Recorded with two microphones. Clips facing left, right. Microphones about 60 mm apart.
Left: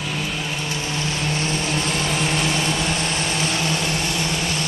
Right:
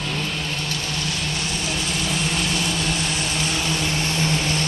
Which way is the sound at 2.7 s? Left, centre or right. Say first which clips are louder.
Left 2 dB; centre.